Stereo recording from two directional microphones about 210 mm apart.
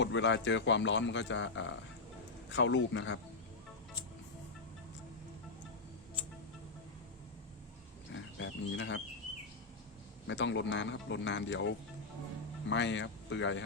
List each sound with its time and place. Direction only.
0.0 s speech: 60° left (ahead or behind)
8.1 s pig: 60° left (ahead or behind)
10.2 s speech: 60° left (ahead or behind)